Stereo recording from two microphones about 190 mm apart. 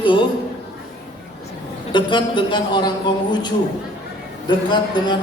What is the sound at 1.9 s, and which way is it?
A man's voice, 25° left (ahead or behind).